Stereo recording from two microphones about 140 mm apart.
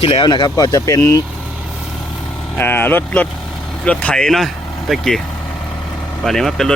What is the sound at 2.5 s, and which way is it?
Speech, 15° left (ahead or behind).